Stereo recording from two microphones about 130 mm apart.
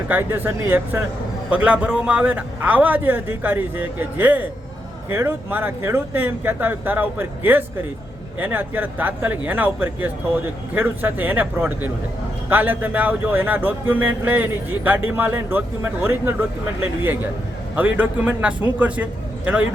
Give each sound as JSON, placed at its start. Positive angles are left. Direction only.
{"t": 0.1, "sound": "speech", "side_deg": -15}